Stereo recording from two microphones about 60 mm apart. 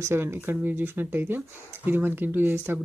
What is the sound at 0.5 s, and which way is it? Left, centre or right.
Speech, right.